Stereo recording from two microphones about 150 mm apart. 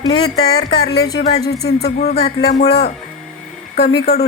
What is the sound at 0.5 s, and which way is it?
Speech, 90° left.